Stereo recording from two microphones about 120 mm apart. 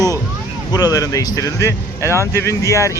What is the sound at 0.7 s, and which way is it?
Speech, 30° left (ahead or behind).